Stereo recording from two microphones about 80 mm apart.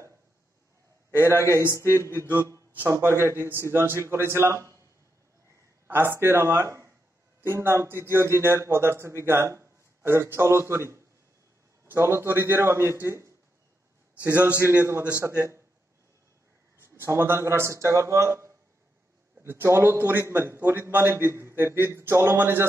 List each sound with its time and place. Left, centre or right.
1.1 s a man's voice: left
2.8 s a man's voice: right
5.9 s a man's voice: right
14.2 s a man's voice: right
15.2 s a man's voice: right
16.7 s a man's voice: right